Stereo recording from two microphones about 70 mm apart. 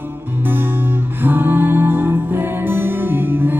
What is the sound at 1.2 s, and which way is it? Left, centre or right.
Music, right.